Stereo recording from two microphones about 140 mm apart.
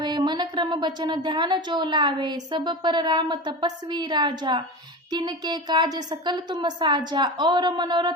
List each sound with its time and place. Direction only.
0.0 s a woman's voice: 30° right (ahead or behind)